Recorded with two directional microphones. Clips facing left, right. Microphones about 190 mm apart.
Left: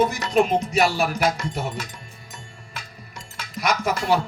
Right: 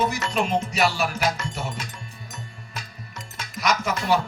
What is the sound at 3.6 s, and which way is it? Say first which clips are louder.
Music: left 1 dB; 55° left (ahead or behind).